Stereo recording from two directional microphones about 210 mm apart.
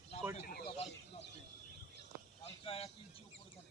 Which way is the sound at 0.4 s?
45° left (ahead or behind).